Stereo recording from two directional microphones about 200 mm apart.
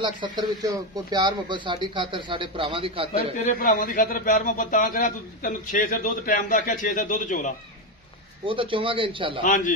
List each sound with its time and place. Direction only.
0.0 s speech: 20° right (ahead or behind)
3.5 s a man's voice: 45° left (ahead or behind)
8.5 s speech: 25° right (ahead or behind)